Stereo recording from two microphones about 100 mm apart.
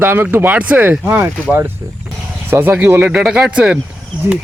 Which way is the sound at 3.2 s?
5° right (ahead or behind).